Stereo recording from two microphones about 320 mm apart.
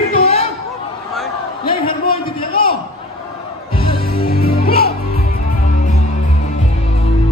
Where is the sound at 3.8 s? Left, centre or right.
Left.